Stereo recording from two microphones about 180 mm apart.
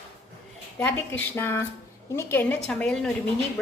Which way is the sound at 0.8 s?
10° left (ahead or behind).